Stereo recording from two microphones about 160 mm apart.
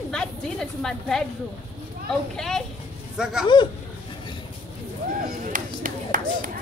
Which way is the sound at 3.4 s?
30° left (ahead or behind).